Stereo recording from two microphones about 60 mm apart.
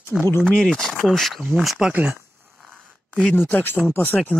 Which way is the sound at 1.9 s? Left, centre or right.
Right.